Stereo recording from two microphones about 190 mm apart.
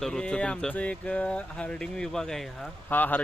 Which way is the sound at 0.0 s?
5° left (ahead or behind).